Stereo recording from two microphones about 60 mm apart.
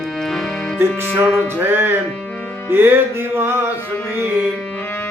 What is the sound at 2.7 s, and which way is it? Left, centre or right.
Music, right.